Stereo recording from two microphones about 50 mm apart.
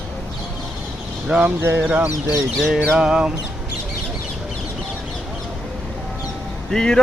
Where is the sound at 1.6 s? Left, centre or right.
Right.